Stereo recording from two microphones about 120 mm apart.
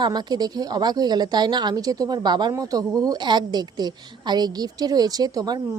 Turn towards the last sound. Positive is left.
turn(degrees=-35)  # may be behind; listen again after turning